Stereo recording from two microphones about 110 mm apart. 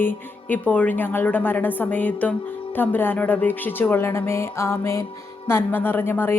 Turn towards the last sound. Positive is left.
turn(degrees=20)  # may be behind; listen again after turning